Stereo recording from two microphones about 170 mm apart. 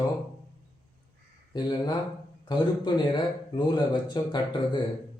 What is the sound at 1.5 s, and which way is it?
Speech, 25° left (ahead or behind).